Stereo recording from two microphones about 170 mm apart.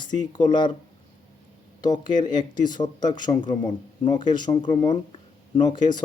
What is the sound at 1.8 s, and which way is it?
Speech, 25° left (ahead or behind).